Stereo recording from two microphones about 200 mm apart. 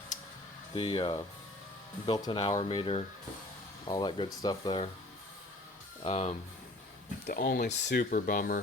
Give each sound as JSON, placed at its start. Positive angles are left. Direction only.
{"t": 0.8, "sound": "speech", "side_deg": 25}
{"t": 6.0, "sound": "speech", "side_deg": 30}
{"t": 7.3, "sound": "speech", "side_deg": 50}